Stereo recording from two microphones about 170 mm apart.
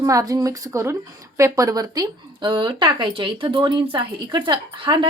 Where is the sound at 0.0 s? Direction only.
20° right (ahead or behind).